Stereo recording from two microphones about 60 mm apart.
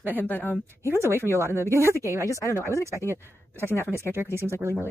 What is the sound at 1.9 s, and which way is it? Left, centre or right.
Speech, right.